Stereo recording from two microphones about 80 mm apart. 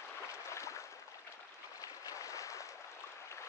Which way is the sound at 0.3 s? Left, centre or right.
Left.